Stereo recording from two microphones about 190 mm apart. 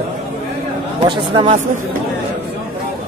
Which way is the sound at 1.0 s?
25° right (ahead or behind).